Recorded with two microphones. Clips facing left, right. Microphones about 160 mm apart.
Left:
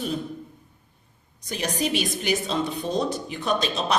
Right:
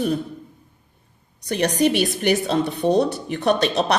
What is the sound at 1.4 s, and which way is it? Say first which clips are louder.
A woman's voice: right 8 dB; 65° right (ahead or behind).